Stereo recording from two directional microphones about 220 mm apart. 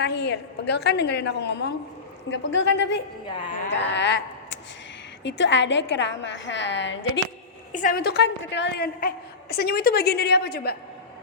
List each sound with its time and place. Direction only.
0.0 s a woman's voice: 50° left (ahead or behind)
7.7 s a woman's voice: 35° left (ahead or behind)